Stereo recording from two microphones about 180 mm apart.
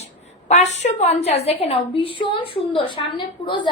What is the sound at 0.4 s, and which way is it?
A woman's voice, 40° left (ahead or behind).